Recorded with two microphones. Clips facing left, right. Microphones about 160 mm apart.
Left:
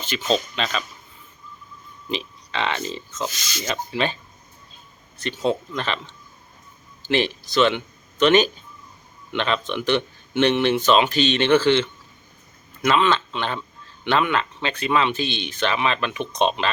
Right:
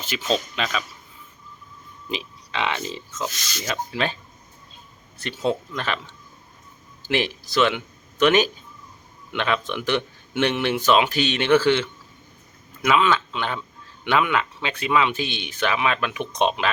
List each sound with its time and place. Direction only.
0.0 s speech: 5° right (ahead or behind)
2.0 s speech: 10° right (ahead or behind)
5.4 s speech: 20° left (ahead or behind)
7.1 s speech: 10° right (ahead or behind)